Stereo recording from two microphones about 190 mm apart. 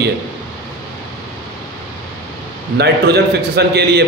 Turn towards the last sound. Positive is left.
turn(degrees=-60)  # may be behind; listen again after turning